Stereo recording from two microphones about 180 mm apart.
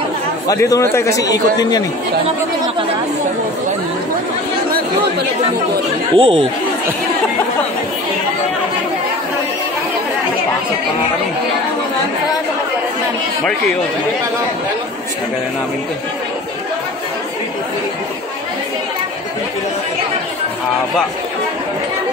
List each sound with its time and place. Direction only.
0.5 s a man's voice: 20° left (ahead or behind)
6.1 s speech: 30° right (ahead or behind)